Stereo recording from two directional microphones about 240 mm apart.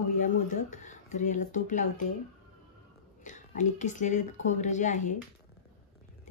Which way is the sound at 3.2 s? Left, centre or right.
Left.